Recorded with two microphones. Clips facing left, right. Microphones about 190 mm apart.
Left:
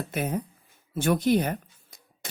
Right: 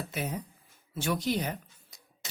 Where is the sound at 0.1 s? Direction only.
55° left (ahead or behind).